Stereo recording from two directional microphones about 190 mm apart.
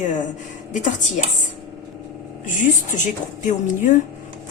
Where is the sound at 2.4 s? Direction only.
40° left (ahead or behind).